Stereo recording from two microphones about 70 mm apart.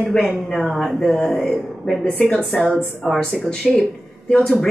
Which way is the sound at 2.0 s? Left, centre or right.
Centre.